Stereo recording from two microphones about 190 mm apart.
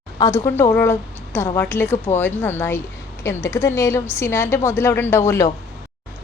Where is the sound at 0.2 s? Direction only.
15° left (ahead or behind).